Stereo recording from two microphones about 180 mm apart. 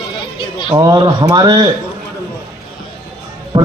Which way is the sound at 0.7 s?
20° right (ahead or behind).